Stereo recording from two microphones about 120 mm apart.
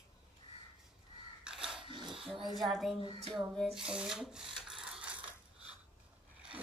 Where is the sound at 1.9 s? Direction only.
45° right (ahead or behind).